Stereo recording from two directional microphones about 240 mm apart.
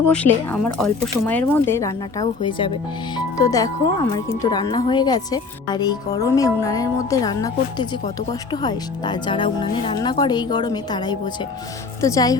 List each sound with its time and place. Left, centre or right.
0.1 s speech: centre